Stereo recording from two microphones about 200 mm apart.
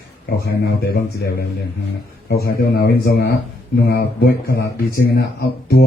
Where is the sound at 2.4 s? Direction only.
50° left (ahead or behind).